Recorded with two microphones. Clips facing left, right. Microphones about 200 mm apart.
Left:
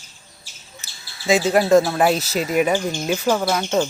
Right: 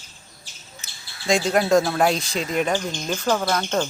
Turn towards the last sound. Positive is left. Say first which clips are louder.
# left 3 dB
turn(degrees=10)  # may be behind; listen again after turning